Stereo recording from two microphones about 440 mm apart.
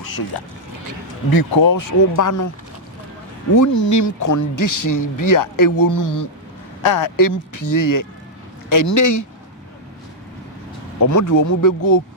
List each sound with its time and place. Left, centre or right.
0.3 s speech: left
3.5 s speech: left
6.8 s speech: left
11.0 s speech: left